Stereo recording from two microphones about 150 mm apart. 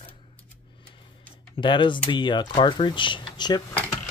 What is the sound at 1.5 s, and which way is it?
Speech, 35° left (ahead or behind).